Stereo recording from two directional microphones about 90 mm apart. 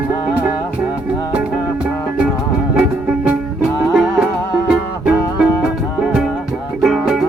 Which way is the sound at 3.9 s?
10° right (ahead or behind).